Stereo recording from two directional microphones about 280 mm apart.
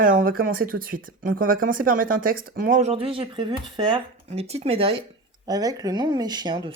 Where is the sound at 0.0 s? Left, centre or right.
Right.